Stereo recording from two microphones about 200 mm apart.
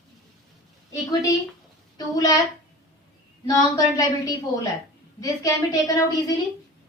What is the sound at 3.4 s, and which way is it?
A woman's voice, 15° left (ahead or behind).